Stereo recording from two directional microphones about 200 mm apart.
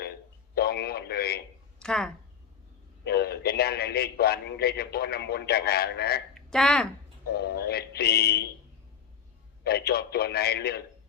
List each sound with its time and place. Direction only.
0.5 s radio: 55° left (ahead or behind)
1.8 s a woman's voice: 5° left (ahead or behind)
3.0 s a man's voice: 55° left (ahead or behind)
6.3 s a sound: 5° left (ahead or behind)
7.3 s a man's voice: 50° left (ahead or behind)
9.6 s a man's voice: 50° left (ahead or behind)